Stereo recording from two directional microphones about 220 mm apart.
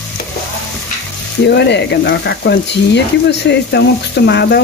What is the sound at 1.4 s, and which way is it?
Frying, 50° left (ahead or behind).